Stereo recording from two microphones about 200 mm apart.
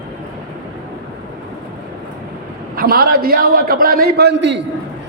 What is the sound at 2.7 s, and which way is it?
A man's voice, 50° right (ahead or behind).